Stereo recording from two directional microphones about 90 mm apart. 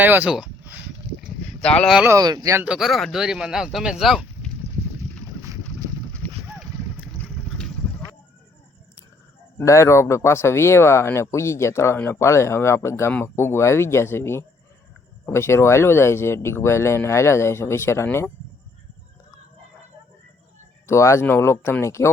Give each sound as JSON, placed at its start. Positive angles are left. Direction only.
{"t": 0.0, "sound": "speech", "side_deg": -20}
{"t": 0.3, "sound": "a sound", "side_deg": -10}
{"t": 1.6, "sound": "speech", "side_deg": 10}
{"t": 2.1, "sound": "speech", "side_deg": -45}
{"t": 2.6, "sound": "speech", "side_deg": -5}
{"t": 6.2, "sound": "a sound", "side_deg": 20}
{"t": 7.4, "sound": "vehicle", "side_deg": 15}
{"t": 9.6, "sound": "speech", "side_deg": 35}
{"t": 20.8, "sound": "speech", "side_deg": 30}